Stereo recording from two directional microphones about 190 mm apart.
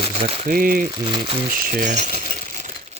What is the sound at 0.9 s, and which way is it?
Speech, 25° right (ahead or behind).